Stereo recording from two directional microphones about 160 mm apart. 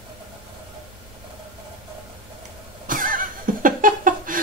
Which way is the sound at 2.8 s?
60° right (ahead or behind).